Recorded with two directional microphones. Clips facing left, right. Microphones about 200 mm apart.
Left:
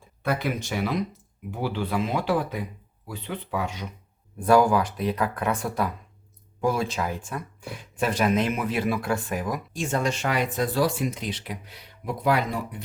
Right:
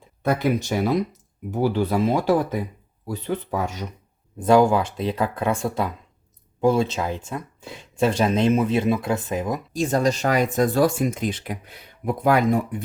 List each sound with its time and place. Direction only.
0.2 s speech: 40° right (ahead or behind)
4.4 s speech: 20° right (ahead or behind)
9.7 s speech: 35° right (ahead or behind)